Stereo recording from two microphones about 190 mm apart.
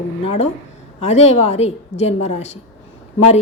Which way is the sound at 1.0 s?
35° left (ahead or behind).